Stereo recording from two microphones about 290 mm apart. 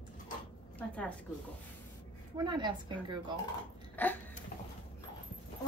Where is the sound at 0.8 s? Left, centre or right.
Centre.